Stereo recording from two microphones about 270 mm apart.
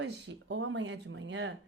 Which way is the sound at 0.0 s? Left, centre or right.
Right.